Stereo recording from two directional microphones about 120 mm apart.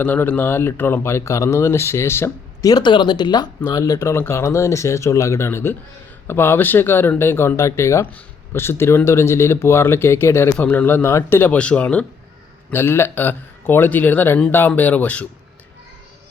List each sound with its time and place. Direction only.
0.0 s speech: 15° left (ahead or behind)
11.5 s speech: 10° left (ahead or behind)